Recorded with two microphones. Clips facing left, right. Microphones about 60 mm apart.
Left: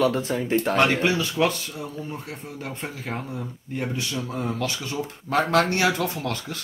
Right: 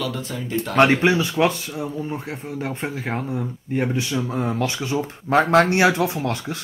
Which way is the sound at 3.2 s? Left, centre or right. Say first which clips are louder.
Right 6 dB; centre.